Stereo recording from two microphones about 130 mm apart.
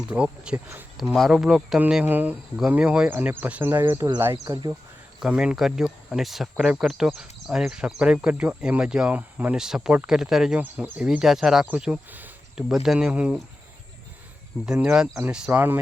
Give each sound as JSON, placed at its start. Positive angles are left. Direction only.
{"t": 0.1, "sound": "speech", "side_deg": -10}
{"t": 5.2, "sound": "speech", "side_deg": -5}
{"t": 14.7, "sound": "speech", "side_deg": -5}